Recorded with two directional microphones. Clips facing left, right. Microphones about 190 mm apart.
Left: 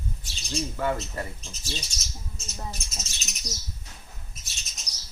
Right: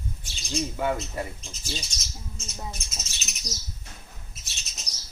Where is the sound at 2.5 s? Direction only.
Centre (ahead or behind).